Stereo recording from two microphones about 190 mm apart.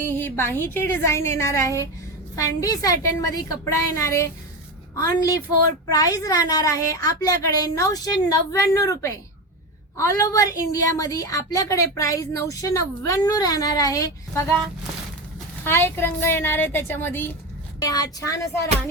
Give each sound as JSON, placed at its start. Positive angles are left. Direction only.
{"t": 0.0, "sound": "a woman's voice", "side_deg": 10}
{"t": 15.6, "sound": "a woman's voice", "side_deg": 10}